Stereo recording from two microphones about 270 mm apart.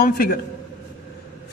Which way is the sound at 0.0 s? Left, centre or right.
Left.